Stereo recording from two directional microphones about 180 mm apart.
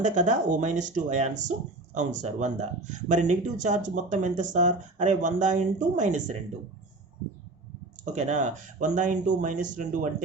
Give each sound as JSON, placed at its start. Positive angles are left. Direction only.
{"t": 0.0, "sound": "speech", "side_deg": -45}
{"t": 8.1, "sound": "speech", "side_deg": -40}